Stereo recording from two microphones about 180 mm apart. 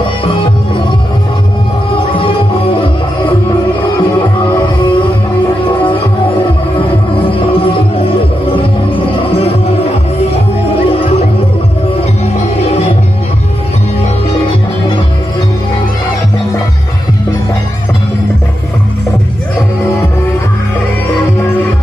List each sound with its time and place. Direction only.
2.0 s music: 30° left (ahead or behind)
5.9 s music: 25° left (ahead or behind)
10.3 s music: 35° left (ahead or behind)